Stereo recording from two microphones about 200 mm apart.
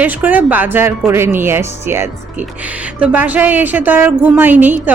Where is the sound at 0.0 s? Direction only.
10° right (ahead or behind).